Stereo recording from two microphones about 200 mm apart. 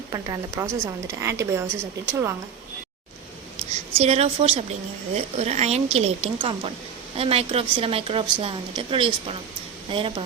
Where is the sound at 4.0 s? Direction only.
30° right (ahead or behind).